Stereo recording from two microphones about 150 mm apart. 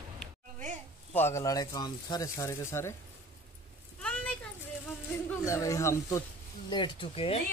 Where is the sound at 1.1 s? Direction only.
15° left (ahead or behind).